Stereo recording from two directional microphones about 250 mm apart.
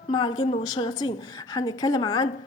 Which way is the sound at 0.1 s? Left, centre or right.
Centre.